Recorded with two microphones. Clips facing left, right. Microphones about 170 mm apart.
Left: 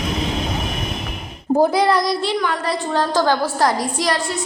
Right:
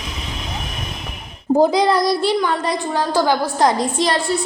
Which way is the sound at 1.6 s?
15° right (ahead or behind).